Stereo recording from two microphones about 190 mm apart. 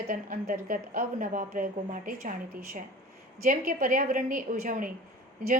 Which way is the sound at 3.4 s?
45° right (ahead or behind).